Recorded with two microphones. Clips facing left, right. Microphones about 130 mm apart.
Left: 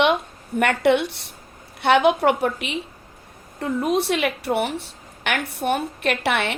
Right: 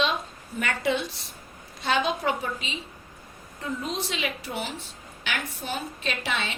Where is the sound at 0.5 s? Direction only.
70° left (ahead or behind).